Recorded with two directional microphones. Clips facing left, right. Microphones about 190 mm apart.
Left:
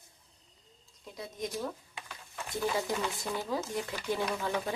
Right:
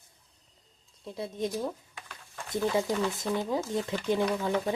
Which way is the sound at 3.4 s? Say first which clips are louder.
Right 4 dB; 20° right (ahead or behind).